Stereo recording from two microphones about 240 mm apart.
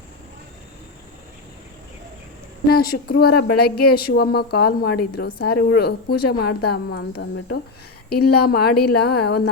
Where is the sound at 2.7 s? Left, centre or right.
Left.